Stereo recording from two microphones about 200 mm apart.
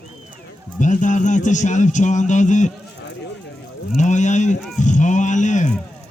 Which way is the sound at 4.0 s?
35° left (ahead or behind).